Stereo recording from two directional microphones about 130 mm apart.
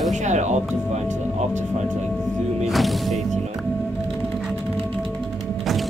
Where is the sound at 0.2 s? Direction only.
65° right (ahead or behind).